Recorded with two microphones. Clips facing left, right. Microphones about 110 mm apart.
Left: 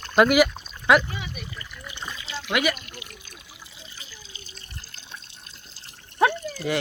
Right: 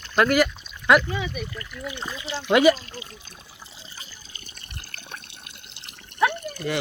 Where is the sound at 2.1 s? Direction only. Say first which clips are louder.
Right 7 dB; 20° right (ahead or behind).